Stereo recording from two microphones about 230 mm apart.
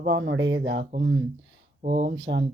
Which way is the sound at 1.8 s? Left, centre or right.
Right.